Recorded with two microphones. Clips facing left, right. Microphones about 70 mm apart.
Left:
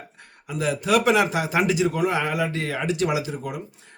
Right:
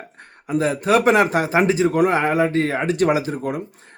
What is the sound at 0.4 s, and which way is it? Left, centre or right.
A man's voice, right.